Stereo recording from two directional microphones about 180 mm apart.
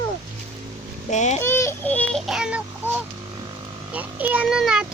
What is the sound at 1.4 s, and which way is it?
Synthetic singing, 15° left (ahead or behind).